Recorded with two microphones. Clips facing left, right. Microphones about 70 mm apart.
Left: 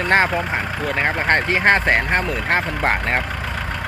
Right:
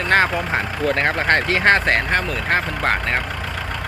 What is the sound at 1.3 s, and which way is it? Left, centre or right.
Speech, left.